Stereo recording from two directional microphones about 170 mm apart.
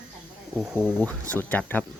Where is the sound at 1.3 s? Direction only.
10° left (ahead or behind).